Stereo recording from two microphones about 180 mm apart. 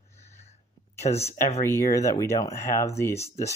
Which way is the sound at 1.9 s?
15° left (ahead or behind).